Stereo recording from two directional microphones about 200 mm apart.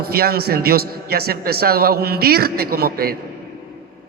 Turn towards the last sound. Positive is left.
turn(degrees=-50)  # may be behind; listen again after turning